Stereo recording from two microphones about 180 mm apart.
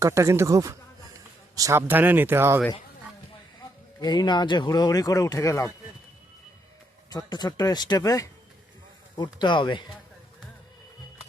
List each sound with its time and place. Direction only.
0.0 s speech: 15° right (ahead or behind)
4.0 s speech: 25° left (ahead or behind)
7.1 s speech: 20° left (ahead or behind)